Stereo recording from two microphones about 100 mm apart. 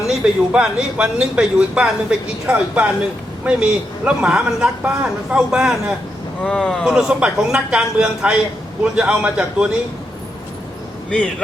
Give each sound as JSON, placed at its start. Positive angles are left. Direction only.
{"t": 0.1, "sound": "speech", "side_deg": -10}
{"t": 6.4, "sound": "speech", "side_deg": 10}
{"t": 6.8, "sound": "speech", "side_deg": -10}
{"t": 11.1, "sound": "speech", "side_deg": 10}